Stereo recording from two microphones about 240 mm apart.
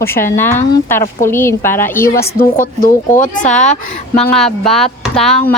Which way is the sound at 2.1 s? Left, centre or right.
Left.